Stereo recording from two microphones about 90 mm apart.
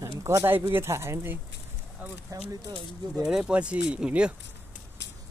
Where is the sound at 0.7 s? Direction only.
30° right (ahead or behind).